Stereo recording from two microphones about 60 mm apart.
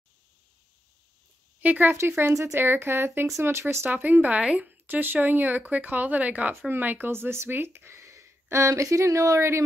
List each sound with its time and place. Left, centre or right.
1.6 s speech: right
2.0 s a woman's voice: right
2.3 s speech: right
2.6 s a woman's voice: right
3.9 s a woman's voice: right
7.1 s speech: right